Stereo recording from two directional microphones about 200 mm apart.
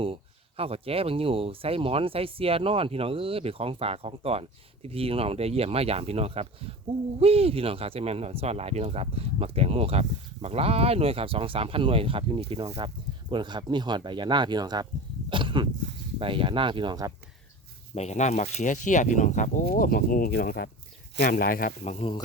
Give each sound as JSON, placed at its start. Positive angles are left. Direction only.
{"t": 0.0, "sound": "speech", "side_deg": -30}
{"t": 15.3, "sound": "a sound", "side_deg": -25}
{"t": 16.1, "sound": "speech", "side_deg": -25}
{"t": 17.9, "sound": "speech", "side_deg": 35}
{"t": 21.8, "sound": "speech", "side_deg": 30}